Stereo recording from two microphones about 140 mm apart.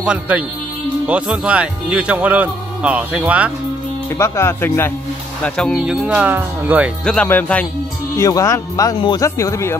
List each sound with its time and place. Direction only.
0.0 s speech: 5° right (ahead or behind)
4.2 s speech: 20° left (ahead or behind)
5.4 s speech: 5° left (ahead or behind)
5.9 s speech: 10° right (ahead or behind)
7.1 s speech: 10° left (ahead or behind)
8.2 s speech: 25° left (ahead or behind)